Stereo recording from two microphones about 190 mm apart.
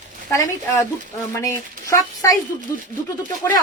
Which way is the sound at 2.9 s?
45° right (ahead or behind).